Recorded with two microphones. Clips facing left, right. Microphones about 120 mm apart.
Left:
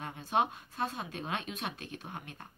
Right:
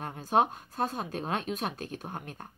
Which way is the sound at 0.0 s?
45° right (ahead or behind).